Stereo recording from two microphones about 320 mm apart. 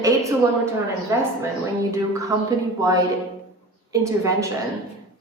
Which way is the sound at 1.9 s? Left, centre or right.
Centre.